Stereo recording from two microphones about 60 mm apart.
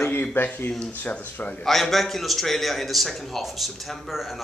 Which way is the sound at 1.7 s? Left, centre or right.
Centre.